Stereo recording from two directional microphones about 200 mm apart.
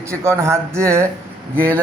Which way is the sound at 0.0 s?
15° right (ahead or behind).